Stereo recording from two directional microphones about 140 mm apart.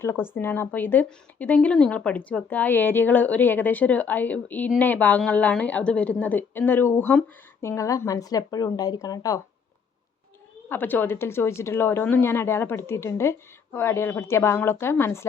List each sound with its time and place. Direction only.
0.0 s speech: 15° left (ahead or behind)
10.7 s a woman's voice: 15° left (ahead or behind)